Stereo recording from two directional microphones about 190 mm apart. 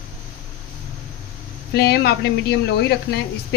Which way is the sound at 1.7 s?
55° left (ahead or behind).